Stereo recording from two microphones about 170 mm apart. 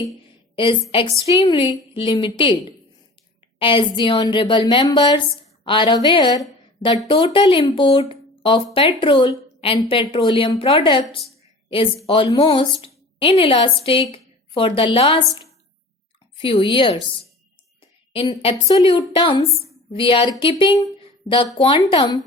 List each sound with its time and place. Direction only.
0.5 s a woman's voice: 30° left (ahead or behind)
18.1 s a woman's voice: 30° left (ahead or behind)